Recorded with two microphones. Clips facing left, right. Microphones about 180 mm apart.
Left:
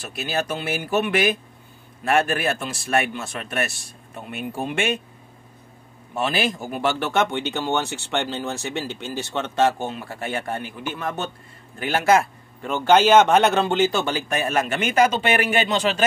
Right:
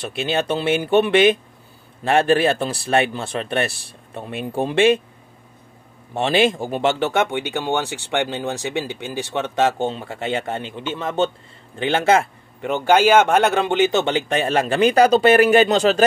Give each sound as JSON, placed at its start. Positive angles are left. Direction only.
{"t": 0.1, "sound": "a man's voice", "side_deg": -25}
{"t": 6.1, "sound": "a man's voice", "side_deg": -25}